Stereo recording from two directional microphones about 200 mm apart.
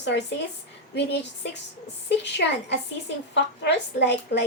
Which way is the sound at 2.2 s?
60° left (ahead or behind).